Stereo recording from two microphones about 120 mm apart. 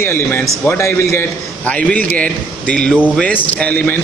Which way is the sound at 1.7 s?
10° left (ahead or behind).